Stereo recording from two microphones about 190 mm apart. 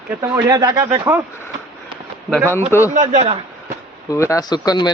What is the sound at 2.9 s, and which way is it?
Speech, 35° right (ahead or behind).